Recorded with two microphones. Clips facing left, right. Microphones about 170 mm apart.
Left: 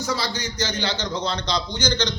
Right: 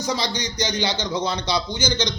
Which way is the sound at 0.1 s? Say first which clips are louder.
Right 3 dB; 15° right (ahead or behind).